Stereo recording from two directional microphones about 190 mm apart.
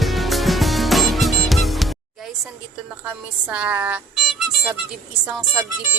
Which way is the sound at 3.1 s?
5° right (ahead or behind).